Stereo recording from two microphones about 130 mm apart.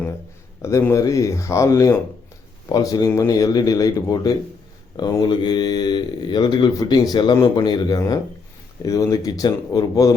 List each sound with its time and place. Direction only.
0.6 s a man's voice: 20° left (ahead or behind)